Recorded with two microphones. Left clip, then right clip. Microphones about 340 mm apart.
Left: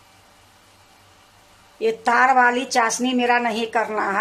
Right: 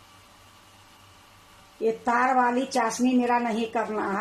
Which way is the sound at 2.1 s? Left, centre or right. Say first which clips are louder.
Left 7 dB; left.